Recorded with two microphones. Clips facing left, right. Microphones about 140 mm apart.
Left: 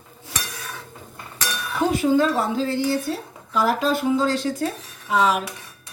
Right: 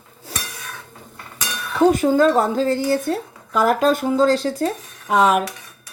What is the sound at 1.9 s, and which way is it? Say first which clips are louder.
Speech: right 1 dB; 45° right (ahead or behind).